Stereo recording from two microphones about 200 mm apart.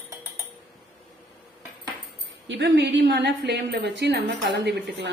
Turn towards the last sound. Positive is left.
turn(degrees=-55)  # may be behind; listen again after turning